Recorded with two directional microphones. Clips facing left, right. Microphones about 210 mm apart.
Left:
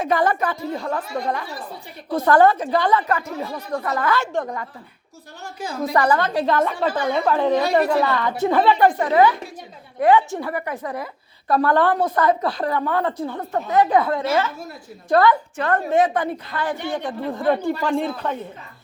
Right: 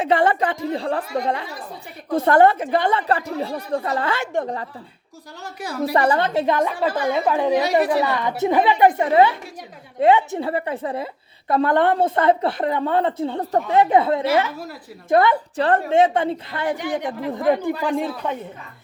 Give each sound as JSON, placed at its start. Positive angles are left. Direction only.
{"t": 0.0, "sound": "a woman's voice", "side_deg": -30}
{"t": 5.9, "sound": "a woman's voice", "side_deg": -25}
{"t": 13.4, "sound": "speech", "side_deg": -35}
{"t": 13.7, "sound": "a woman's voice", "side_deg": -25}